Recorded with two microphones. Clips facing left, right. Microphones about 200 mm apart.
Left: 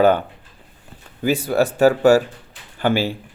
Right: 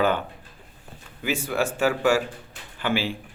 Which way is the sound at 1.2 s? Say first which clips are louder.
Left 7 dB; 40° left (ahead or behind).